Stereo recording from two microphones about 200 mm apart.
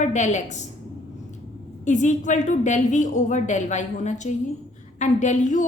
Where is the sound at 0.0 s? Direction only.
35° left (ahead or behind).